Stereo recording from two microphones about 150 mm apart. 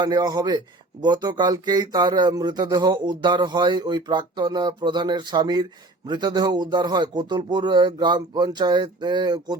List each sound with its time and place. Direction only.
0.0 s speech: 25° right (ahead or behind)